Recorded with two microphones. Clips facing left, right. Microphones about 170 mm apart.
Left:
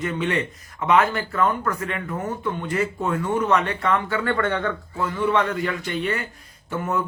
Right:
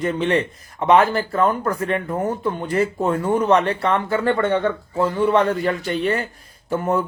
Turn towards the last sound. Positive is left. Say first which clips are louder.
# right 5 dB
turn(degrees=-35)  # may be behind; listen again after turning